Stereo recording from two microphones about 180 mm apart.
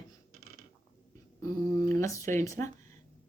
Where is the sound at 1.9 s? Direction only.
15° left (ahead or behind).